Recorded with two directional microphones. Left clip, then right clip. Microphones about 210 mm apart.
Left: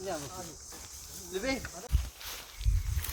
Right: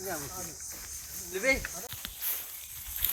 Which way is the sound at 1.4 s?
50° left (ahead or behind).